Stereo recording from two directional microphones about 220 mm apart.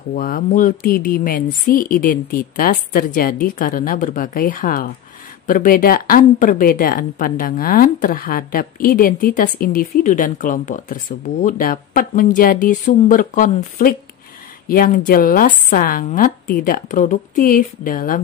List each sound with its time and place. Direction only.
0.1 s speech: 40° left (ahead or behind)